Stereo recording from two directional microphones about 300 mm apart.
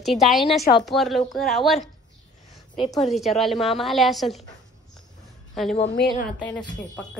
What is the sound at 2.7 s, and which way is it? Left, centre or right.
Speech, centre.